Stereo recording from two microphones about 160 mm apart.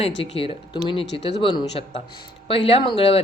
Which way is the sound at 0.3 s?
35° left (ahead or behind).